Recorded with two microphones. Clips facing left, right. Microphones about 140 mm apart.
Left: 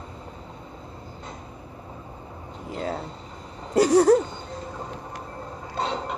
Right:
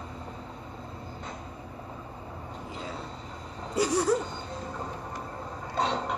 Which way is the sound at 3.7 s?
60° left (ahead or behind).